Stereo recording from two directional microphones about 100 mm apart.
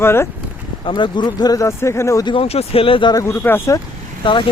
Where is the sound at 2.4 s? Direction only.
85° left; by 3.1 s 60° left (ahead or behind).